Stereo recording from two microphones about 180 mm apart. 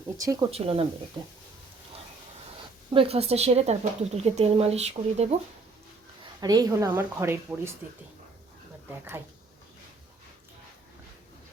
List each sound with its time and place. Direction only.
0.2 s a woman's voice: 20° right (ahead or behind)
0.5 s a woman's voice: 35° right (ahead or behind)
2.9 s speech: 30° right (ahead or behind)
6.4 s a woman's voice: 20° right (ahead or behind)
8.9 s speech: 10° right (ahead or behind)